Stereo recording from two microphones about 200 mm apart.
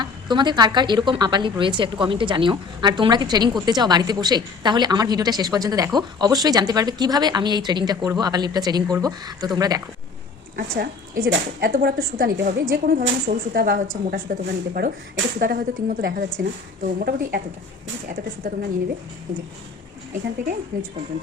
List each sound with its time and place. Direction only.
0.0 s a woman's voice: 20° right (ahead or behind)
10.6 s speech: 50° right (ahead or behind)
18.4 s speech: 50° right (ahead or behind)